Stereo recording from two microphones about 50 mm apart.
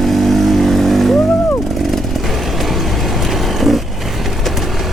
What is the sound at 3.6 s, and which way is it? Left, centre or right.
Vehicle, centre.